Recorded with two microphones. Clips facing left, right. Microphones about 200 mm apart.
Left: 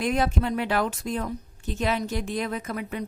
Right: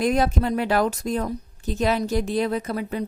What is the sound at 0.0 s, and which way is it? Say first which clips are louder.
A woman's voice: right 4 dB; 40° right (ahead or behind).